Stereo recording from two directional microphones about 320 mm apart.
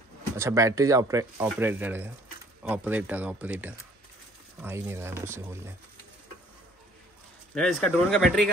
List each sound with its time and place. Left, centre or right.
0.4 s speech: centre
7.5 s speech: centre